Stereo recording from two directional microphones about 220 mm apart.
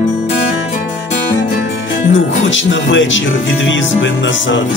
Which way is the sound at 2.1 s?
60° left (ahead or behind).